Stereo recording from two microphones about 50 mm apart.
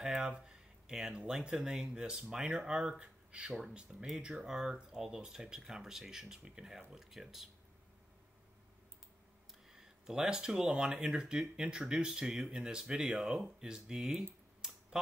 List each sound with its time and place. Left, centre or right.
0.2 s a sound: centre
1.4 s speech: centre
9.7 s speech: centre